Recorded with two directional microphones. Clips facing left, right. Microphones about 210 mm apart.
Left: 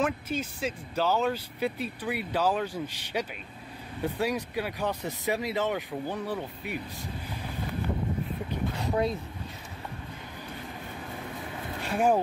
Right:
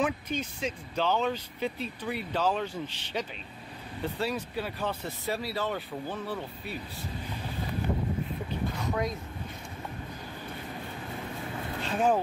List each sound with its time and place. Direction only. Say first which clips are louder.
0.0 s speech: left 1 dB; 5° left (ahead or behind)
8.8 s vehicle: left 4 dB; 30° left (ahead or behind)
11.8 s speech: left 2 dB; 10° left (ahead or behind)